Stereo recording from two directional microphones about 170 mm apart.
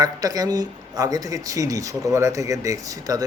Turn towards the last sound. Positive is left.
turn(degrees=-20)  # may be behind; listen again after turning